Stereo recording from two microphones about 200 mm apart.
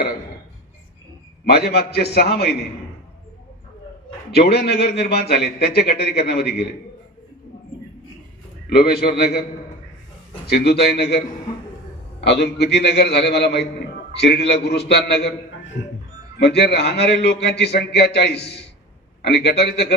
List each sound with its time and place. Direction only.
1.5 s a man's voice: 55° left (ahead or behind)
4.3 s a man's voice: 55° left (ahead or behind)
8.7 s a man's voice: 55° left (ahead or behind)
10.4 s a man's voice: 55° left (ahead or behind)
12.2 s a man's voice: 55° left (ahead or behind)
16.4 s a man's voice: 55° left (ahead or behind)